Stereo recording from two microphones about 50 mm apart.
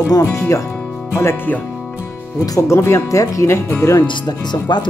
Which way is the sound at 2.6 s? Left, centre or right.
Left.